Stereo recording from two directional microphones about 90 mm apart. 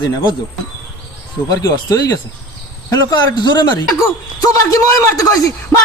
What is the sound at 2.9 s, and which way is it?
Speech, 55° left (ahead or behind).